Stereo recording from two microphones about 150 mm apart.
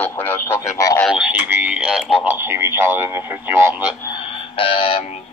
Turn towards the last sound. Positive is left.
turn(degrees=35)  # may be behind; listen again after turning